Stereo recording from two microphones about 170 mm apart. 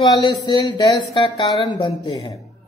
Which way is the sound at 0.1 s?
25° left (ahead or behind).